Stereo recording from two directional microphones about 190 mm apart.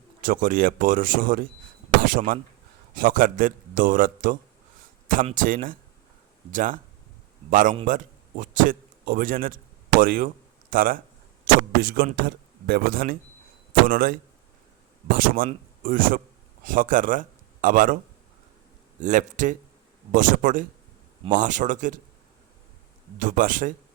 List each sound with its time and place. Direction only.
0.2 s a man's voice: 45° right (ahead or behind)
23.1 s a man's voice: 45° right (ahead or behind)